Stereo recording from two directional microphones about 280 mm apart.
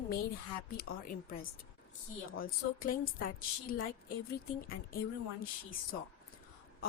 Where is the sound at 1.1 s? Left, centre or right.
Left.